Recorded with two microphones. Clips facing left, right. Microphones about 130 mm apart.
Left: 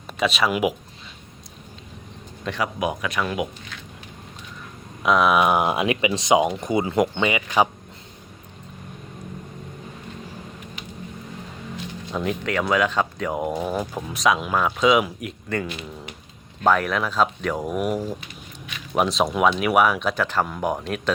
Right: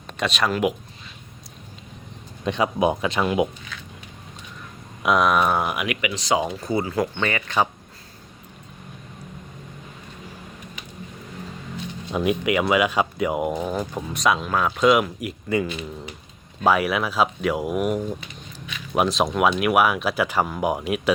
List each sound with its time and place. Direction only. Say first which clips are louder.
0.1 s speech: left 2 dB; 5° left (ahead or behind)
2.4 s speech: right 4 dB; 20° right (ahead or behind)
5.0 s speech: left 1 dB; centre (ahead or behind)
5.7 s speech: left 5 dB; 30° left (ahead or behind); by 7.7 s 10° left (ahead or behind)
12.1 s speech: right 3 dB; 10° right (ahead or behind)
13.6 s speech: even; 10° left (ahead or behind); by 21.1 s 10° right (ahead or behind)